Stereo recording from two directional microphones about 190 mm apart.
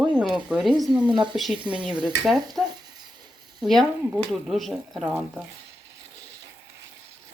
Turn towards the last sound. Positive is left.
turn(degrees=0)  # may be behind; listen again after turning